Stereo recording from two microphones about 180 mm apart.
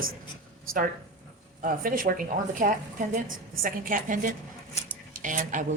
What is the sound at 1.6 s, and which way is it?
A woman's voice, 50° right (ahead or behind).